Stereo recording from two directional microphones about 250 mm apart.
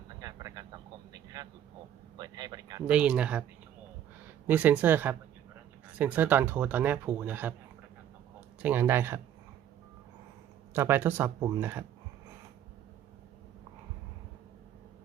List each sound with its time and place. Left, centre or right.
0.2 s a sound: centre
1.1 s vehicle: centre
2.1 s a sound: centre
2.8 s speech: centre
4.4 s speech: centre
8.6 s speech: centre
10.8 s speech: centre